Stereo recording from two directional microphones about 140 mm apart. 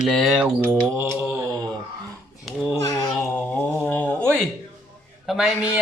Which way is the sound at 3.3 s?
10° left (ahead or behind).